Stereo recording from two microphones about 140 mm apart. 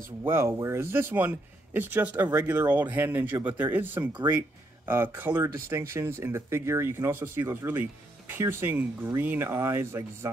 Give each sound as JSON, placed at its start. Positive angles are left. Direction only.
{"t": 0.2, "sound": "speech", "side_deg": -15}